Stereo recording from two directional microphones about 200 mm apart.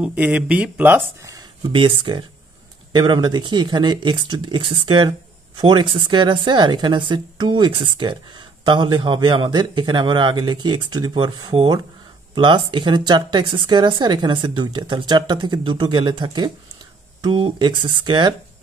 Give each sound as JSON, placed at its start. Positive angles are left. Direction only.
{"t": 0.0, "sound": "a woman's voice", "side_deg": -5}